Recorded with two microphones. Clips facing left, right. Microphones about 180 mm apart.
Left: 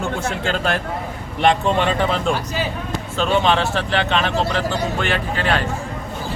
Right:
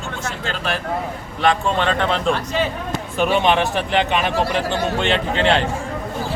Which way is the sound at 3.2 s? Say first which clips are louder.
Right 1 dB; 15° right (ahead or behind).